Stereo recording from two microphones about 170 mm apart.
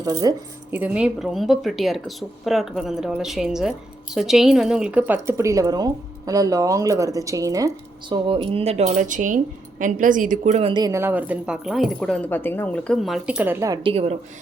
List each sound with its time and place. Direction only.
0.0 s speech: 20° right (ahead or behind)
0.7 s speech: 5° right (ahead or behind)
8.1 s speech: 30° right (ahead or behind); by 13.7 s 15° right (ahead or behind)
13.8 s speech: 35° right (ahead or behind)